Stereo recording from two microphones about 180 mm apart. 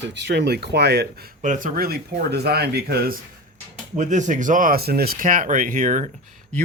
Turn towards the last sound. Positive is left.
turn(degrees=-45)  # may be behind; listen again after turning